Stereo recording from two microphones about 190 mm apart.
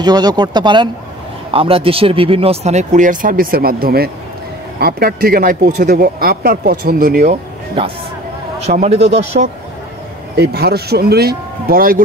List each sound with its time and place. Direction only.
0.0 s speech: 20° right (ahead or behind); by 7.3 s 45° right (ahead or behind)
8.5 s speech: 35° right (ahead or behind)
9.3 s speech: 45° right (ahead or behind)
10.3 s a man's voice: 55° right (ahead or behind)